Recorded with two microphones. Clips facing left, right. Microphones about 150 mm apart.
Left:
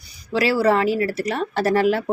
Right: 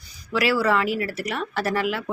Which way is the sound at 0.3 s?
30° left (ahead or behind).